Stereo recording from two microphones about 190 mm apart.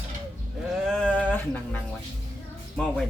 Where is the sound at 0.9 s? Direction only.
5° left (ahead or behind).